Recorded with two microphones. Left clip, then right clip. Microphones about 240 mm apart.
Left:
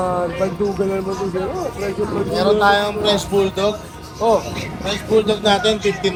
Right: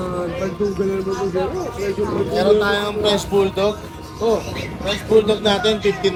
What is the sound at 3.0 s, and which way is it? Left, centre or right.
Music, right.